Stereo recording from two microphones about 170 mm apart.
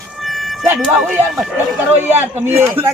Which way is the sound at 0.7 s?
Centre (ahead or behind).